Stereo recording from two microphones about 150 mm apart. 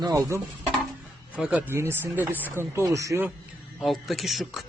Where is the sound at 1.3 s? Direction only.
10° right (ahead or behind).